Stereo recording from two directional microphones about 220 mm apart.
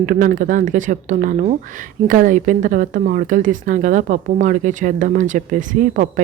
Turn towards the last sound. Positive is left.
turn(degrees=-35)  # may be behind; listen again after turning